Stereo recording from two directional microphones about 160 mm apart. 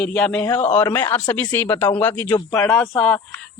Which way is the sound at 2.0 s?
10° left (ahead or behind).